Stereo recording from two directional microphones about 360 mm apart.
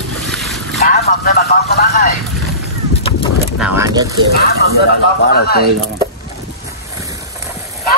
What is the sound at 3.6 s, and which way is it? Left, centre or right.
Speech, centre.